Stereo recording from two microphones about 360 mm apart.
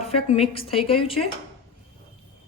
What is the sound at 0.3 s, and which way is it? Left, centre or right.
A woman's voice, centre.